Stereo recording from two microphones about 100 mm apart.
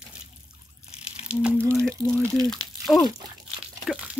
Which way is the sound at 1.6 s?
30° right (ahead or behind).